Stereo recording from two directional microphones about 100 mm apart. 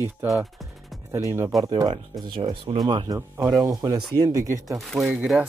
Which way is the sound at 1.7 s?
45° right (ahead or behind).